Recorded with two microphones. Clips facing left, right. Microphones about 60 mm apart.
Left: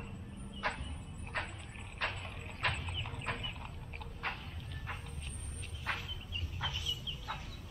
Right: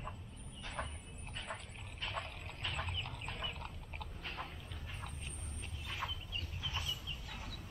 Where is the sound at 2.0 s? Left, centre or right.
Left.